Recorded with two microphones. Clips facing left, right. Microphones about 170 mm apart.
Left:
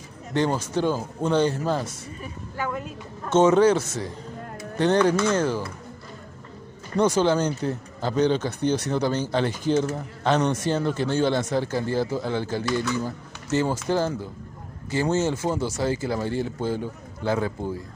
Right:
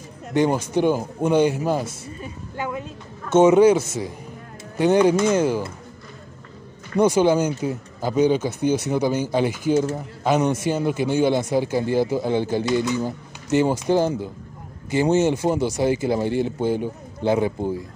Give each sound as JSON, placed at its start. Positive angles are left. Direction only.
{"t": 0.3, "sound": "a man's voice", "side_deg": -15}
{"t": 3.3, "sound": "a man's voice", "side_deg": -10}
{"t": 7.0, "sound": "a man's voice", "side_deg": -10}